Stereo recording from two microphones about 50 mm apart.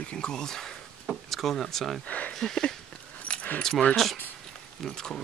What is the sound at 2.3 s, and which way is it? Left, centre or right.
Speech, centre.